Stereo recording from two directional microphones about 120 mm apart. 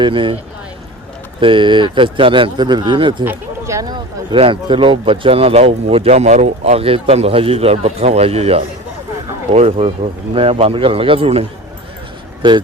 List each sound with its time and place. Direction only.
0.0 s speech: 45° right (ahead or behind)
1.4 s speech: 45° right (ahead or behind)
3.2 s speech: 25° right (ahead or behind)
4.3 s speech: 45° right (ahead or behind)
12.4 s speech: 40° right (ahead or behind)